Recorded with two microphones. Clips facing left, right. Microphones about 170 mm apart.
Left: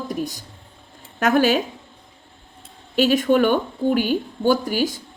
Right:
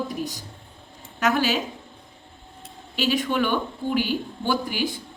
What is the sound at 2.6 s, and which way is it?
A woman's voice, 50° left (ahead or behind).